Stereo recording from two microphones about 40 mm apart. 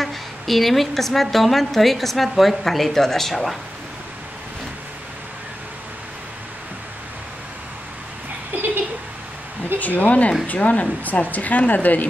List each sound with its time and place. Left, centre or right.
0.0 s a woman's voice: centre
9.8 s speech: left